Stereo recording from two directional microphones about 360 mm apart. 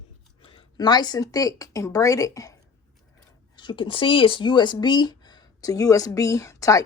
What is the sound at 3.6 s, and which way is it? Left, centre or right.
Speech, centre.